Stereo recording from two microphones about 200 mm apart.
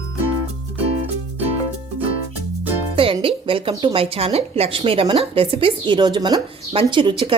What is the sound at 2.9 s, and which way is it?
Speech, 25° right (ahead or behind).